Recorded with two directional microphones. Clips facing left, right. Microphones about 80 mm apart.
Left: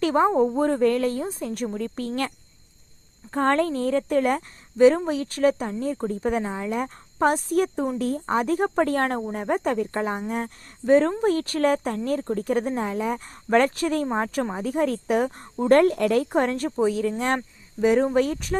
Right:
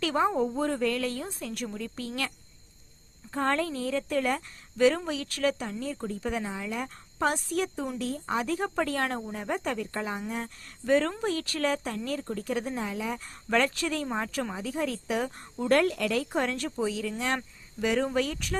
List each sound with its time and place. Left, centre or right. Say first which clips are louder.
0.0 s a woman's voice: left 6 dB; left
3.3 s speech: left 6 dB; left